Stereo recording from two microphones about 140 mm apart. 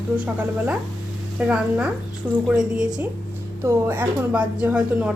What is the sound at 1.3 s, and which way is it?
A woman's voice, 5° right (ahead or behind).